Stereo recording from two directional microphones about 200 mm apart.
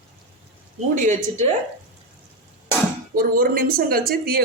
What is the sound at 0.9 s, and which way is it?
Speech, 35° right (ahead or behind).